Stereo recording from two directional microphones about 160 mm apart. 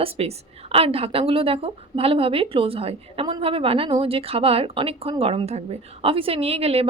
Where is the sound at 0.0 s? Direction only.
40° right (ahead or behind).